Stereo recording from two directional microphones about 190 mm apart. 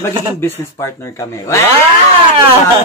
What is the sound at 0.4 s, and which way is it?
Speech, 15° left (ahead or behind).